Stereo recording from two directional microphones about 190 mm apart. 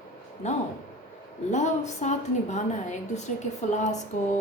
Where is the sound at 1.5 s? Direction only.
40° left (ahead or behind).